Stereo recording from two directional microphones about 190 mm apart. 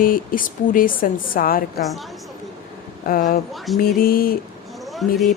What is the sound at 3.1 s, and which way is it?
Speech, 50° left (ahead or behind).